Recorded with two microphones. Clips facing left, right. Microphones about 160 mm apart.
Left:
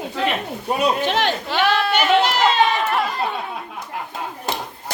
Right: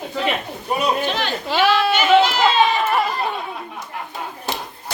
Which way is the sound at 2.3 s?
75° left (ahead or behind).